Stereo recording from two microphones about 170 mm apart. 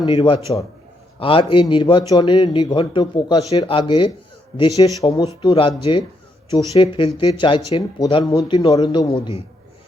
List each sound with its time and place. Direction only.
0.0 s a man's voice: 30° left (ahead or behind)